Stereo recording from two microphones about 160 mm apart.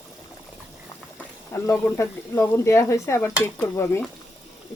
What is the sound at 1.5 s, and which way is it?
Speech, 15° left (ahead or behind).